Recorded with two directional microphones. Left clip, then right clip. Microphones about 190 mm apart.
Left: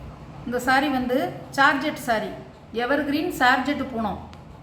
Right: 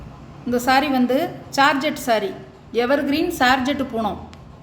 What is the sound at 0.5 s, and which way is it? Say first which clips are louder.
A woman's voice: right 4 dB; 45° right (ahead or behind).